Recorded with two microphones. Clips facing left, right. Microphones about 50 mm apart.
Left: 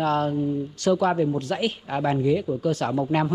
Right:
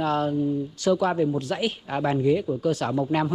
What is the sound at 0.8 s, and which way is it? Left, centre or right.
Speech, left.